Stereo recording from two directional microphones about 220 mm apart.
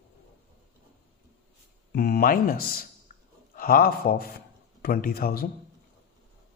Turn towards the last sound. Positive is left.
turn(degrees=45)  # may be behind; listen again after turning